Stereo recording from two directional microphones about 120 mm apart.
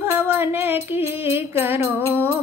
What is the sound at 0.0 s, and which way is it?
Music, 20° right (ahead or behind).